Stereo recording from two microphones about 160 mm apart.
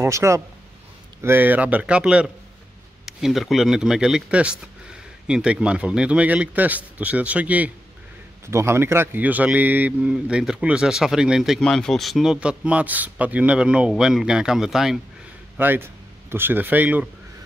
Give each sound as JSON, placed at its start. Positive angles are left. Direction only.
{"t": 0.0, "sound": "a man's voice", "side_deg": -15}